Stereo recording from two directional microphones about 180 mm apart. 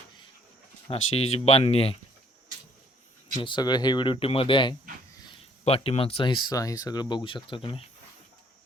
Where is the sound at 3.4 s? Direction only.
25° left (ahead or behind).